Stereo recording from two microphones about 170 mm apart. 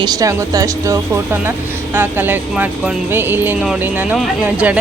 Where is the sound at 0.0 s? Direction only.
20° right (ahead or behind).